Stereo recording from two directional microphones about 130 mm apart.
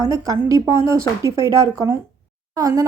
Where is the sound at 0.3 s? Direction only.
25° right (ahead or behind).